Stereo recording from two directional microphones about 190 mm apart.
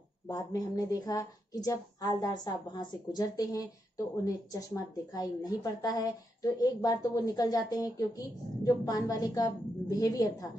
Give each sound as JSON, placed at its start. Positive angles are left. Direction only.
{"t": 0.3, "sound": "a woman's voice", "side_deg": 20}